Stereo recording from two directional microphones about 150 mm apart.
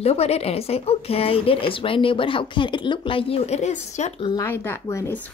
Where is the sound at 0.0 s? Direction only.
45° left (ahead or behind).